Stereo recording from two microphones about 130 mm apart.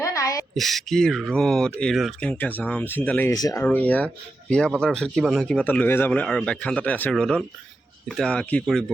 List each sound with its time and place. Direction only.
0.0 s a sound: 25° left (ahead or behind)
0.5 s speech: centre (ahead or behind)
3.3 s speech: 30° left (ahead or behind)
3.6 s speech: 15° left (ahead or behind)